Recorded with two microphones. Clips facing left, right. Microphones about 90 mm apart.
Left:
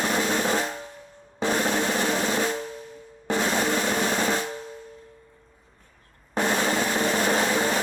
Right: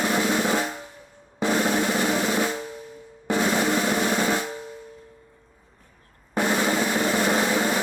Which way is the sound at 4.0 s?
20° right (ahead or behind).